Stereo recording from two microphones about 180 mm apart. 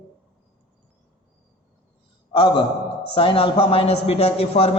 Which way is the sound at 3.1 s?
30° left (ahead or behind).